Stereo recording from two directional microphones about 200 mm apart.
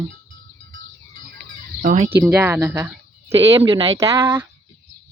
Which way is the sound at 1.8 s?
40° right (ahead or behind).